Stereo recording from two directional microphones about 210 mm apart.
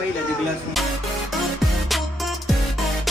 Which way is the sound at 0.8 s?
Centre (ahead or behind).